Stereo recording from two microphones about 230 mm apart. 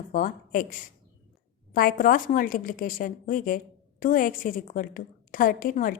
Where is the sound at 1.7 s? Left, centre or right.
Left.